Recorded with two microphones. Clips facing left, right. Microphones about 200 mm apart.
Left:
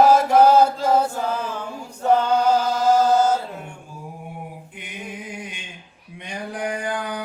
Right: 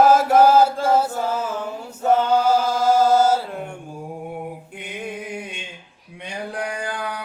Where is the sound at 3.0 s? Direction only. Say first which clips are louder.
Right 1 dB; 10° right (ahead or behind).